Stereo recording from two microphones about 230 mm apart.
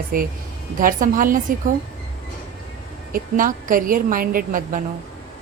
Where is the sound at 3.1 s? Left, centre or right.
Right.